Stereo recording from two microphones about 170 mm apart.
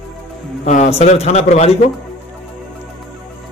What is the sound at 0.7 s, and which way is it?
A man's voice, 40° left (ahead or behind).